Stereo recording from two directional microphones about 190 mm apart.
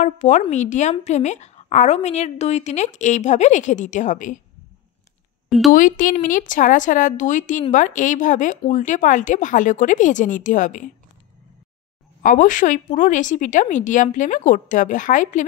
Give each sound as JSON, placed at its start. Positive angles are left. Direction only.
{"t": 0.0, "sound": "a woman's voice", "side_deg": 40}
{"t": 5.7, "sound": "a woman's voice", "side_deg": 45}
{"t": 12.2, "sound": "a woman's voice", "side_deg": 45}